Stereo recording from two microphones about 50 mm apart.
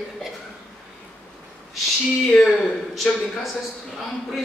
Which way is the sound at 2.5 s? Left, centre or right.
Centre.